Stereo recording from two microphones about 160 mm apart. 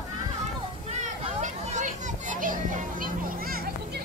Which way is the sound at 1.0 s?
50° right (ahead or behind).